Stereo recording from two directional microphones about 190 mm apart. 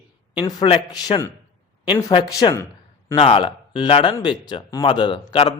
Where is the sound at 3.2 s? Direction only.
30° left (ahead or behind).